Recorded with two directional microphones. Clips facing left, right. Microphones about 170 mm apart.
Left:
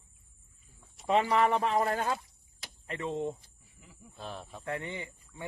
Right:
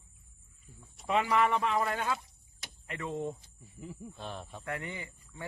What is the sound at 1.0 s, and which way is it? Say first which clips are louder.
A man's voice: left 2 dB; 35° left (ahead or behind).